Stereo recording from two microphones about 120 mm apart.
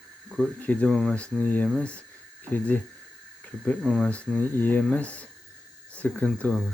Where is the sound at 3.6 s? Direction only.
5° left (ahead or behind).